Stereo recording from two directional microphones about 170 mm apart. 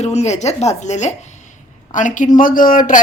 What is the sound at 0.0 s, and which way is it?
Speech, 40° left (ahead or behind).